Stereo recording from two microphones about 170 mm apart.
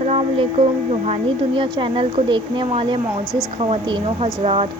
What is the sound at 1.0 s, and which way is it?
A woman's voice, 35° right (ahead or behind).